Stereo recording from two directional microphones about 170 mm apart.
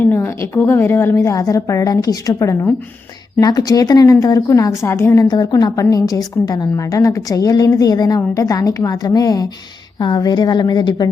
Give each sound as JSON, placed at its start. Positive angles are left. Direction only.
{"t": 0.0, "sound": "a woman's voice", "side_deg": 15}